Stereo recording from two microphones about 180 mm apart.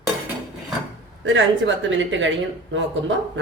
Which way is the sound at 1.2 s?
90° right.